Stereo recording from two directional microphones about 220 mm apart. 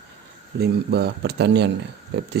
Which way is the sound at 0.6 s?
45° right (ahead or behind).